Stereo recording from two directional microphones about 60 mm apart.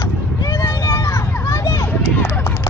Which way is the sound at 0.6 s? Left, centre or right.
Left.